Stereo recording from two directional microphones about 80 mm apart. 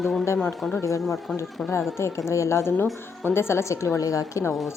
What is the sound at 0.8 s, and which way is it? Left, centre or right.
Speech, left.